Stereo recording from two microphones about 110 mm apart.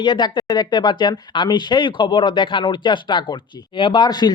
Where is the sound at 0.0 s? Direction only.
45° left (ahead or behind).